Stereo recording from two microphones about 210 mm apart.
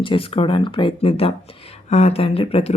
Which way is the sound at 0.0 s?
25° left (ahead or behind).